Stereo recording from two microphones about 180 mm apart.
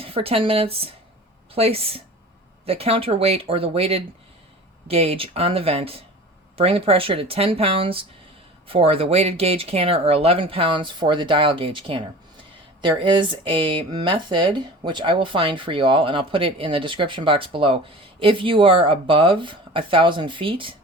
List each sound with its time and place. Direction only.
0.0 s speech: 30° right (ahead or behind)